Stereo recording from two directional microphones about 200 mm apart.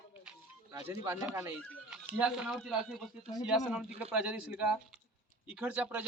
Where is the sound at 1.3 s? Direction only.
10° right (ahead or behind).